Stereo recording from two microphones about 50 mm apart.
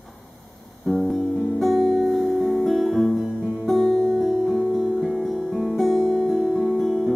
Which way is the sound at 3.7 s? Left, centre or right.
Left.